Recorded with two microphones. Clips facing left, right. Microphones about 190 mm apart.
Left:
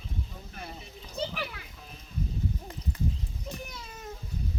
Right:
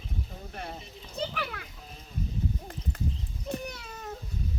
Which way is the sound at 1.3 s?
55° right (ahead or behind).